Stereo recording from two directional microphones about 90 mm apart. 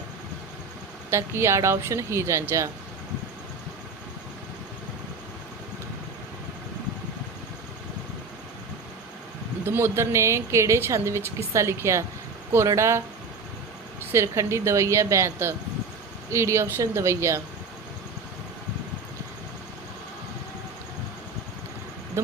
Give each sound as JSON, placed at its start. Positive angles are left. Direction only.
{"t": 1.1, "sound": "a woman's voice", "side_deg": -30}
{"t": 9.6, "sound": "a woman's voice", "side_deg": -25}
{"t": 14.1, "sound": "a woman's voice", "side_deg": -30}